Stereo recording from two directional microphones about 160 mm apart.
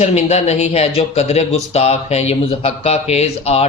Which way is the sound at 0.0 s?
45° left (ahead or behind).